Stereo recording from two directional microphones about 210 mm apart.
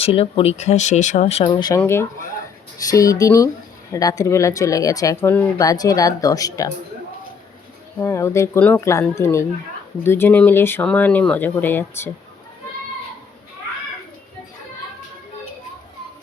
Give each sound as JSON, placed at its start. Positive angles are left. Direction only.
{"t": 0.0, "sound": "speech", "side_deg": 25}
{"t": 7.9, "sound": "speech", "side_deg": 15}